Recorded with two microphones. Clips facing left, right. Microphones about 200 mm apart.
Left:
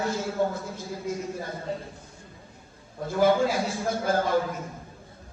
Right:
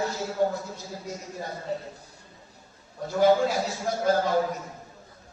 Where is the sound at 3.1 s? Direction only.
50° left (ahead or behind).